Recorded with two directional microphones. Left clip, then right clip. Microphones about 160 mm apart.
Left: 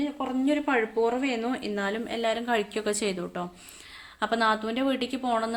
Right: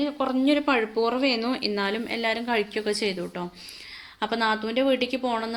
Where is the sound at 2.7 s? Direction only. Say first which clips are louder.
Right 2 dB; 15° left (ahead or behind).